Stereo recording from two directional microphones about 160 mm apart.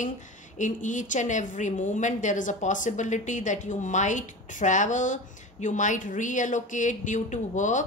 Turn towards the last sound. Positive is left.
turn(degrees=50)  # may be behind; listen again after turning